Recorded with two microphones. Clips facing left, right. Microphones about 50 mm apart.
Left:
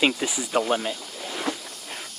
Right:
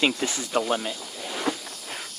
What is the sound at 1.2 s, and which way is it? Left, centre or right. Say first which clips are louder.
Walk: right 1 dB; centre.